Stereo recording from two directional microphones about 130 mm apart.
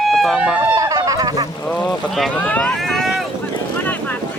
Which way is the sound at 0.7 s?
25° right (ahead or behind).